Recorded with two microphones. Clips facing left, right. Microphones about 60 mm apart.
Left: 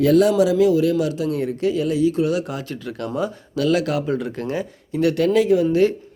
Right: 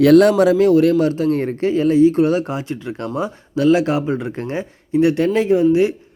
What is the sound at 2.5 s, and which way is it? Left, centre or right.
A man's voice, right.